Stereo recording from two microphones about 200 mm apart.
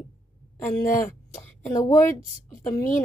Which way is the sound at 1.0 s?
10° left (ahead or behind).